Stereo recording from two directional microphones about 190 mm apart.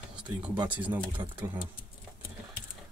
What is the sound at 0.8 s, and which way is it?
Speech, 10° right (ahead or behind).